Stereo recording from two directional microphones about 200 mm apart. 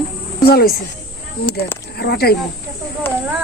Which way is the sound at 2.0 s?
55° left (ahead or behind).